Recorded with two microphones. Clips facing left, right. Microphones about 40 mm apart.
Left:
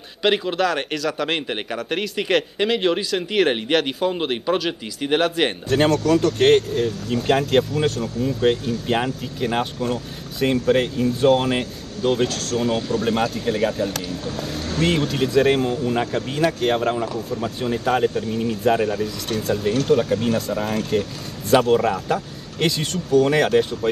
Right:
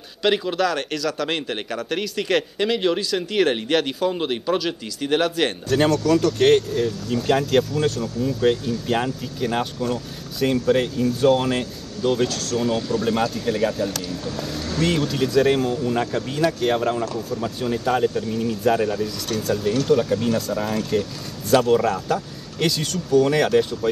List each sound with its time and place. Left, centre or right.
0.2 s a man's voice: centre